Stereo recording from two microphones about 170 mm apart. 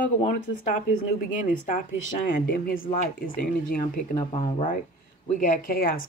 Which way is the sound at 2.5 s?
60° left (ahead or behind).